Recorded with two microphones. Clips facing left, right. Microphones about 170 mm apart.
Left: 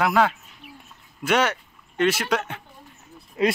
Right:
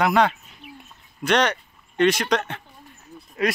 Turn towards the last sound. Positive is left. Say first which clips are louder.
# left 2 dB
turn(degrees=25)  # may be behind; listen again after turning